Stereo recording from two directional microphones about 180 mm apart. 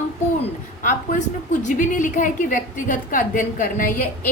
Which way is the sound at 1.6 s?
45° left (ahead or behind).